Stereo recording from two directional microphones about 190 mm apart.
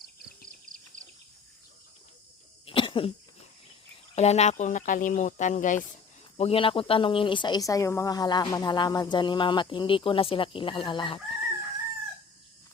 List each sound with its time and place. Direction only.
0.7 s a sound: 45° right (ahead or behind)
2.6 s cough: 25° left (ahead or behind)
4.1 s speech: 35° left (ahead or behind)
6.3 s speech: 30° left (ahead or behind)